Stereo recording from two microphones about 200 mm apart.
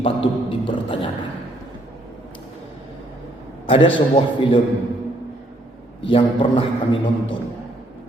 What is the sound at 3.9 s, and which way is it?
Speech, 25° left (ahead or behind).